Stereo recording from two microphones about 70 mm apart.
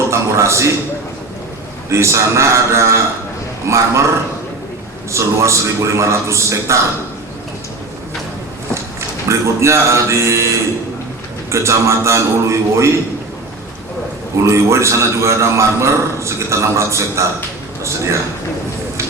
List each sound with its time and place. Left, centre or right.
0.1 s a man's voice: right
1.9 s a man's voice: right
5.1 s a man's voice: right
8.7 s speech: right
11.5 s a man's voice: right
14.4 s a man's voice: right